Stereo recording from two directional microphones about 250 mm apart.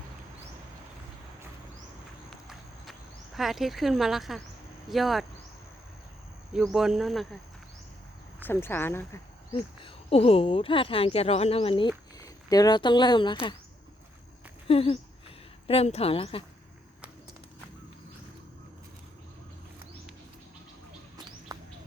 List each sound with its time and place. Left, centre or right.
2.3 s horse: centre
3.3 s speech: centre
6.5 s speech: centre
8.4 s speech: centre
9.8 s speech: left
14.7 s speech: left
21.5 s bird: centre